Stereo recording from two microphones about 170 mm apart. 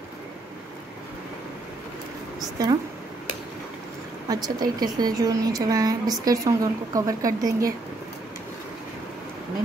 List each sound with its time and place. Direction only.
2.6 s a woman's voice: 20° right (ahead or behind)
4.3 s a woman's voice: 20° right (ahead or behind)